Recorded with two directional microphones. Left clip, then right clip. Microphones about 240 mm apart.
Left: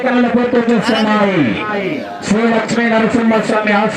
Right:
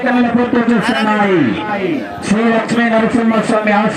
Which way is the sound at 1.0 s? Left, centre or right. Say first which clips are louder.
Right 1 dB; centre.